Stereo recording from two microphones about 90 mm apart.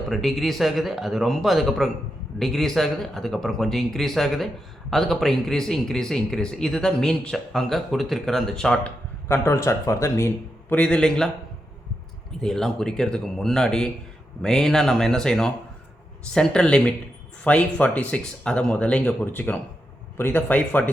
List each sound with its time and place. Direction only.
0.1 s speech: centre (ahead or behind)
9.3 s speech: 30° left (ahead or behind)
10.7 s speech: 10° left (ahead or behind)
12.4 s speech: 5° left (ahead or behind)